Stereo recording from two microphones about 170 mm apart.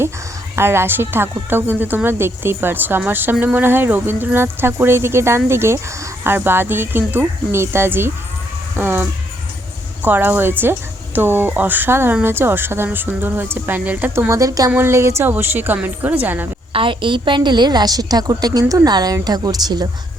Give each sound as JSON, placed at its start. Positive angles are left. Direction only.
{"t": 0.5, "sound": "speech", "side_deg": -15}
{"t": 16.7, "sound": "a woman's voice", "side_deg": -30}